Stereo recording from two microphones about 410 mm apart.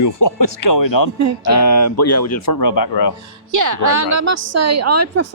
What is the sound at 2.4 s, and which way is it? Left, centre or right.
Speech, left.